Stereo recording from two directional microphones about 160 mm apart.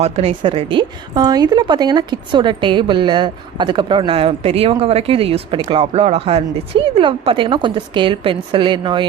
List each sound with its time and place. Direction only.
0.0 s speech: 35° right (ahead or behind)